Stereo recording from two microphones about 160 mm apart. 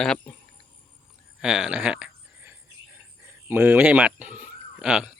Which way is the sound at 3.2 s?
10° right (ahead or behind).